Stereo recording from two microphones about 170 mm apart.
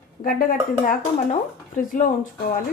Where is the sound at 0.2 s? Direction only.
55° left (ahead or behind).